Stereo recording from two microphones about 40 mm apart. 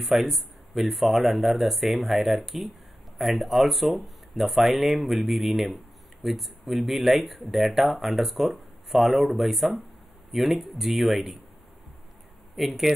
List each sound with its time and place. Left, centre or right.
0.0 s speech: centre
12.5 s speech: centre